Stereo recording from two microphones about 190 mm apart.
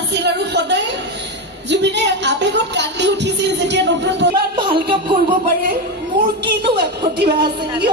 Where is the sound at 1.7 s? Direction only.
65° right (ahead or behind).